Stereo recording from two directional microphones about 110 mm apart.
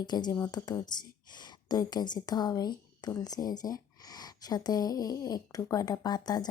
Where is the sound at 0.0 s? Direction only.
40° left (ahead or behind).